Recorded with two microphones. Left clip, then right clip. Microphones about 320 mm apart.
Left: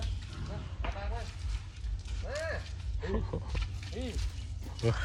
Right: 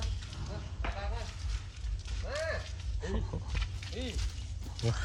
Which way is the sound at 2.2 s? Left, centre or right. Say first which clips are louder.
Right 1 dB; centre.